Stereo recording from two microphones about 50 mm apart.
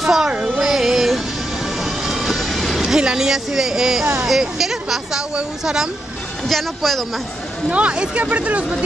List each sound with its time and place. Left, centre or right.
0.0 s music: centre
2.0 s vehicle: centre
2.9 s speech: centre
6.4 s speech: centre
7.7 s speech: right